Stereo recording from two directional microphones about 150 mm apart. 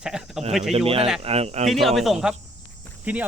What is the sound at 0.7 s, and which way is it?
Speech, 40° right (ahead or behind).